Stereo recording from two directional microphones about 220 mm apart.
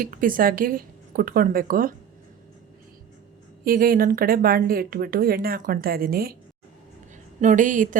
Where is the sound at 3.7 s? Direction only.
40° right (ahead or behind).